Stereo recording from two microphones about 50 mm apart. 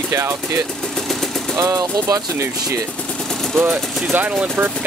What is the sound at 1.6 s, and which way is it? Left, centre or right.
Speech, right.